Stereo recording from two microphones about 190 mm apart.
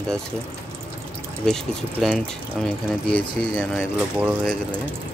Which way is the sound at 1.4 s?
5° left (ahead or behind).